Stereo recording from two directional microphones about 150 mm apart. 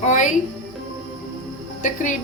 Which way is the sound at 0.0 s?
55° left (ahead or behind).